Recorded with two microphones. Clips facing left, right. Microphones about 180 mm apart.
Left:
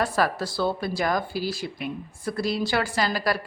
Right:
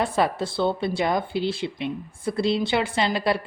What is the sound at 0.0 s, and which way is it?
Speech, 25° right (ahead or behind).